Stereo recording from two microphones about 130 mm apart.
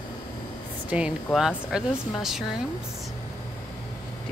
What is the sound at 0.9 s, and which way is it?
Speech, 10° right (ahead or behind).